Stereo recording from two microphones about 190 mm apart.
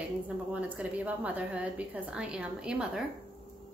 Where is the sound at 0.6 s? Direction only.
5° right (ahead or behind).